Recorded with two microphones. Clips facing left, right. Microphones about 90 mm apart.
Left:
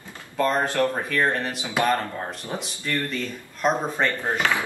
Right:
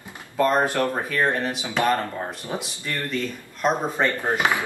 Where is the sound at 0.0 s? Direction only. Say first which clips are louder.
Right 2 dB; 15° right (ahead or behind).